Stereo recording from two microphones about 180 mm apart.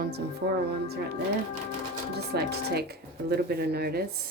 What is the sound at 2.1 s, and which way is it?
Speech, 65° right (ahead or behind).